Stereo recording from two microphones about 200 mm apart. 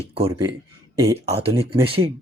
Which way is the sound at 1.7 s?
25° right (ahead or behind).